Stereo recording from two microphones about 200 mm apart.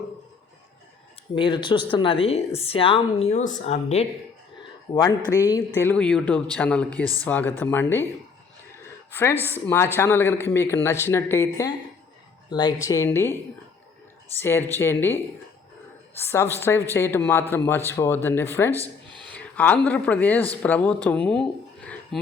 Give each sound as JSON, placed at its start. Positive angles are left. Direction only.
{"t": 1.4, "sound": "a woman's voice", "side_deg": 25}
{"t": 4.9, "sound": "a woman's voice", "side_deg": 20}
{"t": 9.4, "sound": "speech", "side_deg": 10}
{"t": 14.3, "sound": "speech", "side_deg": 10}
{"t": 16.2, "sound": "speech", "side_deg": 10}
{"t": 18.7, "sound": "a sound", "side_deg": -20}
{"t": 19.3, "sound": "speech", "side_deg": 10}